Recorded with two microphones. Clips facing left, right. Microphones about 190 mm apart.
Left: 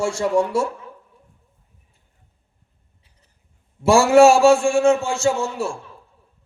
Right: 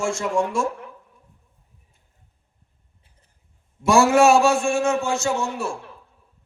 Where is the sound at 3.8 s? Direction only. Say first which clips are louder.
Left 3 dB; 30° left (ahead or behind).